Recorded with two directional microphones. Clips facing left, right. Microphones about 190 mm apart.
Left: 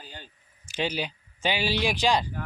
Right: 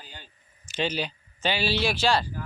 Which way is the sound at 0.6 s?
10° left (ahead or behind).